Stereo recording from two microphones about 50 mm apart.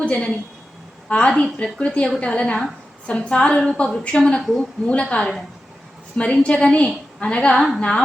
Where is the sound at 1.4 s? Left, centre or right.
Left.